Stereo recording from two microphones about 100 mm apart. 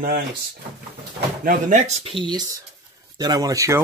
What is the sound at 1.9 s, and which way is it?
Speech, 75° right (ahead or behind).